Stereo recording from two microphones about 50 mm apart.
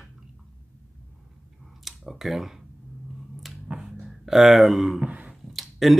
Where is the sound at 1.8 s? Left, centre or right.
Centre.